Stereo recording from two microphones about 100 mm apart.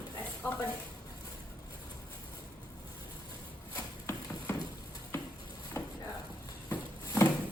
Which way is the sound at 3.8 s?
30° left (ahead or behind).